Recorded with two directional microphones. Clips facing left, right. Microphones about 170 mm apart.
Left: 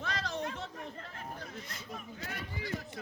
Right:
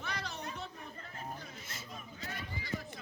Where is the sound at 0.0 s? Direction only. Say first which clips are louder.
Left 5 dB; 90° left.